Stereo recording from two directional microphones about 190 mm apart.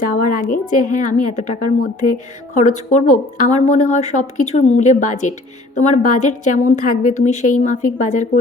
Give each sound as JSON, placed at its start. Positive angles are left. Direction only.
{"t": 0.0, "sound": "a woman's voice", "side_deg": 45}